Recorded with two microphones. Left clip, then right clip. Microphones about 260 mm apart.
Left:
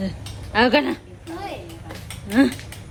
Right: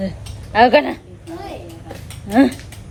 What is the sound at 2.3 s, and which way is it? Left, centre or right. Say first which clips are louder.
Speech: right 4 dB; centre.